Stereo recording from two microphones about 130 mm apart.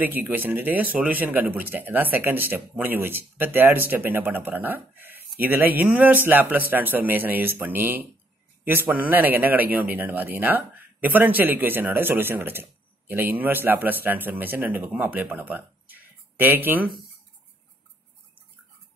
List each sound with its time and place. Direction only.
0.0 s a man's voice: 15° right (ahead or behind)